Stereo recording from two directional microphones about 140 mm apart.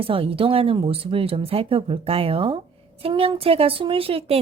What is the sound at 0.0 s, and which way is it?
Speech, 40° right (ahead or behind).